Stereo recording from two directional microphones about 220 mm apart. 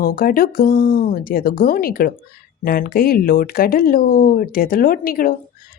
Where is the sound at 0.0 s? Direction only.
40° left (ahead or behind).